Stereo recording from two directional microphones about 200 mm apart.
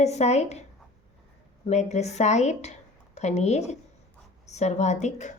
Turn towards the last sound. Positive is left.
turn(degrees=35)  # may be behind; listen again after turning